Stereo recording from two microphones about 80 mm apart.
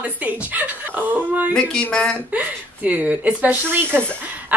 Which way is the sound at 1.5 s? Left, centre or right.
Centre.